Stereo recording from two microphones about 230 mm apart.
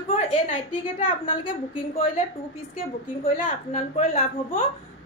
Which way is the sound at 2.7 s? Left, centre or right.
Left.